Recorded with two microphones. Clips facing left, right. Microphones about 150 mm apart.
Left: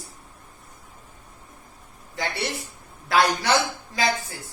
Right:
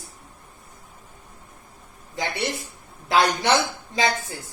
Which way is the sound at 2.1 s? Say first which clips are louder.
Right 2 dB; 20° right (ahead or behind).